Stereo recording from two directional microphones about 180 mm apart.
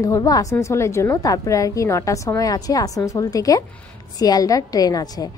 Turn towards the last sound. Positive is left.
turn(degrees=20)  # may be behind; listen again after turning